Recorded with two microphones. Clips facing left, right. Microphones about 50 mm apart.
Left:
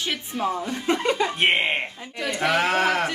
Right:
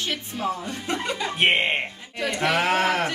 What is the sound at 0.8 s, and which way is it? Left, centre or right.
Speech, left.